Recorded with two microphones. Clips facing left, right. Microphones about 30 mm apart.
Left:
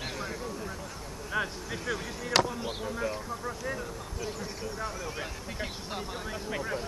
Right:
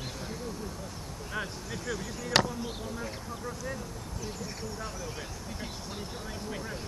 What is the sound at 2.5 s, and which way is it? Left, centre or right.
Speech, left.